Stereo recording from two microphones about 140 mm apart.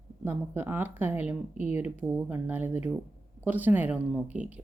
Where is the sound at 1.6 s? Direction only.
50° left (ahead or behind).